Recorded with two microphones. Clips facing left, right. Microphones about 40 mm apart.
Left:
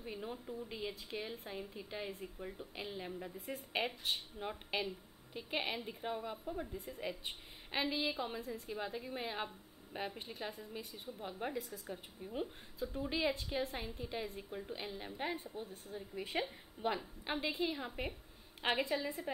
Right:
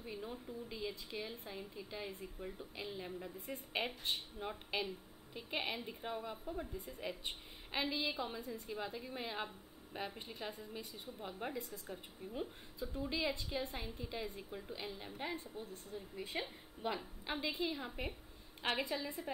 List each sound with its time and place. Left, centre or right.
0.0 s a woman's voice: centre
2.1 s a woman's voice: centre
15.6 s a woman's voice: centre
16.3 s a woman's voice: left
17.5 s a woman's voice: centre